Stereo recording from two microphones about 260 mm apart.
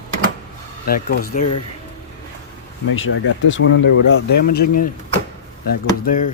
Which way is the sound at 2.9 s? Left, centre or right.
Left.